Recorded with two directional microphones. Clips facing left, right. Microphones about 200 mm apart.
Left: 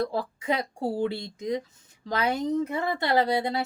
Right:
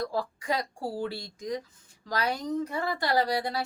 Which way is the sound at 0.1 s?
25° left (ahead or behind).